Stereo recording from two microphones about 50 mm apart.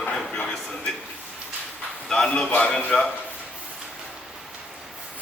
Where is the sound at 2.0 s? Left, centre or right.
Centre.